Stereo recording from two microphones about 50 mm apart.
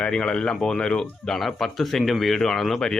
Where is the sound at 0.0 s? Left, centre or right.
Left.